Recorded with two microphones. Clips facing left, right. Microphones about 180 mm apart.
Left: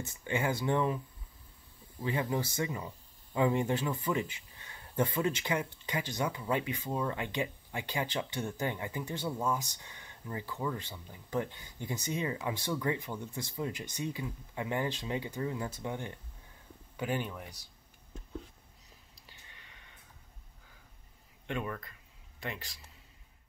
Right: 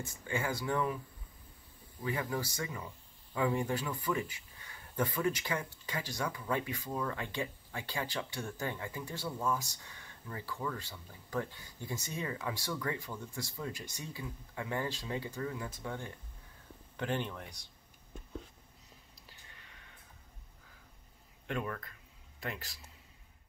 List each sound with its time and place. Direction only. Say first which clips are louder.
0.0 s speech: left 3 dB; 20° left (ahead or behind)
2.0 s speech: left 3 dB; 20° left (ahead or behind)
16.9 s speech: left 1 dB; 10° left (ahead or behind)
19.2 s a sound: left 1 dB; centre (ahead or behind)
21.5 s speech: left 1 dB; centre (ahead or behind)